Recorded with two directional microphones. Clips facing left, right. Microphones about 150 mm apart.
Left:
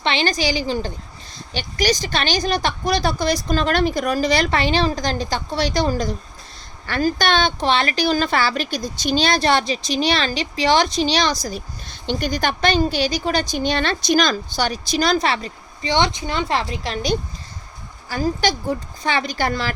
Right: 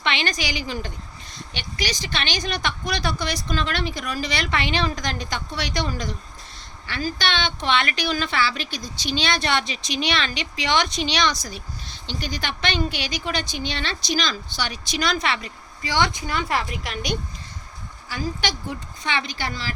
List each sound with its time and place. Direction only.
0.0 s a woman's voice: 30° left (ahead or behind)
6.8 s a woman's voice: 45° left (ahead or behind); by 17.2 s 30° left (ahead or behind)
18.1 s speech: 40° left (ahead or behind)